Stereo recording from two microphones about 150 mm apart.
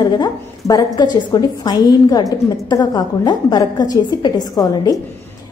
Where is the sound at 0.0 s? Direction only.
25° left (ahead or behind).